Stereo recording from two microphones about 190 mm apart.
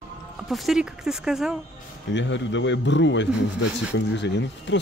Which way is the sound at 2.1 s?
70° left (ahead or behind).